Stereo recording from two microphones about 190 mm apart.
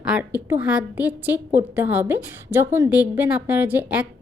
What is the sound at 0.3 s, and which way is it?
A woman's voice, 10° right (ahead or behind).